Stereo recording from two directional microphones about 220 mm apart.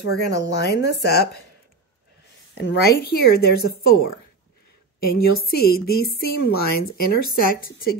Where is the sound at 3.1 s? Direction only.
45° left (ahead or behind).